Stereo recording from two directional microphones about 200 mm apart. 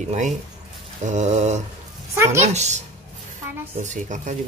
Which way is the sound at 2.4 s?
35° right (ahead or behind).